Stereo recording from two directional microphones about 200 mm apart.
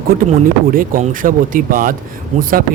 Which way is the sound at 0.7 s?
45° right (ahead or behind).